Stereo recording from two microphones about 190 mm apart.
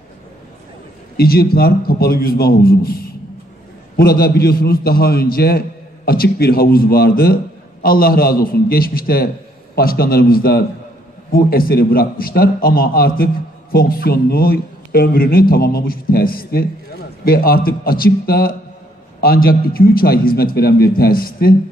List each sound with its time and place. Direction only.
1.1 s a man's voice: 55° left (ahead or behind)